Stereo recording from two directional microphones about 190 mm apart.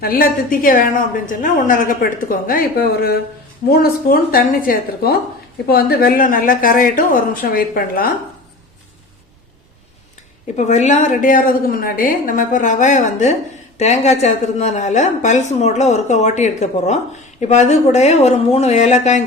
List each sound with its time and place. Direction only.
0.0 s a woman's voice: 50° left (ahead or behind)
10.7 s a woman's voice: 40° left (ahead or behind)